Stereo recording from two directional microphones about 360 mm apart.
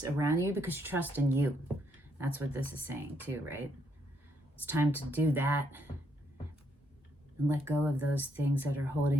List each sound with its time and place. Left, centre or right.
0.2 s speech: centre
7.4 s speech: centre